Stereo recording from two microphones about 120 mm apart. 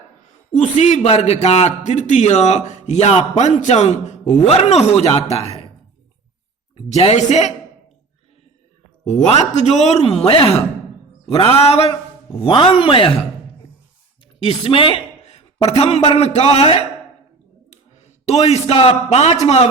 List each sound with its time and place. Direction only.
0.5 s a man's voice: 75° left (ahead or behind); by 5.7 s 60° left (ahead or behind)
6.9 s a man's voice: 65° left (ahead or behind)
9.0 s speech: 70° left (ahead or behind); by 10.4 s 55° left (ahead or behind)
11.5 s speech: 55° left (ahead or behind)
14.3 s a woman's voice: 50° left (ahead or behind)
17.7 s a sound: 65° left (ahead or behind)
19.1 s speech: 65° left (ahead or behind)